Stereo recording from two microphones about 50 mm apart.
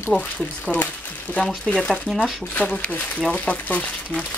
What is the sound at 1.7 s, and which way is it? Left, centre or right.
Speech, centre.